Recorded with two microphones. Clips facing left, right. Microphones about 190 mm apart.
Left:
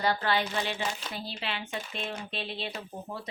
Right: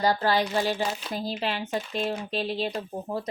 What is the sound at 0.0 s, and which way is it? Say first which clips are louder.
Speech: right 4 dB; 40° right (ahead or behind).